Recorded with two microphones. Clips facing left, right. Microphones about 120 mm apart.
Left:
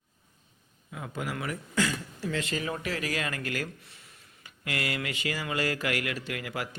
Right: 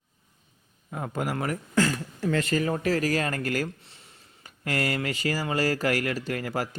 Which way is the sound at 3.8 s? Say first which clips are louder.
Right 1 dB; 30° right (ahead or behind).